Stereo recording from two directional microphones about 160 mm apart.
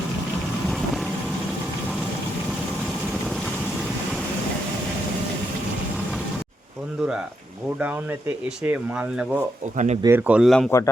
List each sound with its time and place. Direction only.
8.6 s speech: 10° right (ahead or behind)
9.7 s speech: 45° right (ahead or behind)
10.0 s speech: 15° right (ahead or behind)
10.7 s speech: 15° left (ahead or behind)